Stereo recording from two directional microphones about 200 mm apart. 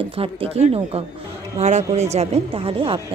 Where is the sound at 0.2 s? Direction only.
30° right (ahead or behind).